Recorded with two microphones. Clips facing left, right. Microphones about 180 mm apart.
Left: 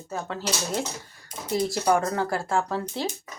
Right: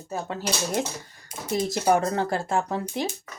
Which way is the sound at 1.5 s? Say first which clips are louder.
Right 1 dB; 20° right (ahead or behind).